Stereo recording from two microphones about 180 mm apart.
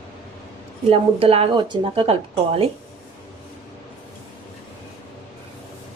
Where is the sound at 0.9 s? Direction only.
35° right (ahead or behind).